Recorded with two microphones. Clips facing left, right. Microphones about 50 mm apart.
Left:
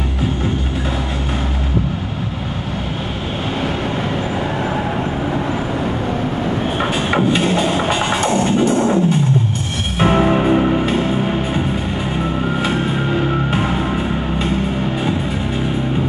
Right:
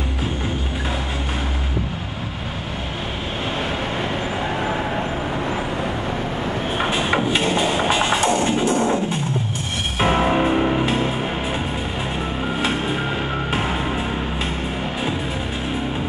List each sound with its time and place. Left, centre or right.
6.8 s a sound: centre
7.3 s music: centre
9.9 s music: centre
13.5 s music: centre